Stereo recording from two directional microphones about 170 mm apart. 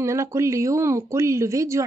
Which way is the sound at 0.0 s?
15° right (ahead or behind).